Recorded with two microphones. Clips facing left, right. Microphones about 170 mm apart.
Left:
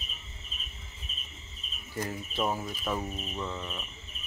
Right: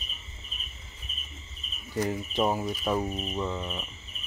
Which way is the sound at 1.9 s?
15° right (ahead or behind).